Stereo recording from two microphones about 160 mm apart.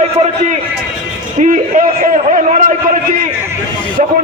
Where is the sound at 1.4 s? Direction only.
55° right (ahead or behind).